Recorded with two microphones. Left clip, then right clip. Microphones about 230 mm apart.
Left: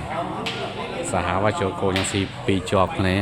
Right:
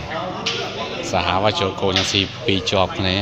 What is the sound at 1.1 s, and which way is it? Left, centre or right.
Speech, centre.